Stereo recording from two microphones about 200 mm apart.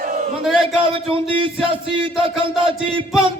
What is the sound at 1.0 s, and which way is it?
Speech, 25° right (ahead or behind).